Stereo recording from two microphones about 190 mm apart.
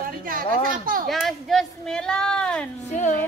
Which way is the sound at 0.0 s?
45° right (ahead or behind).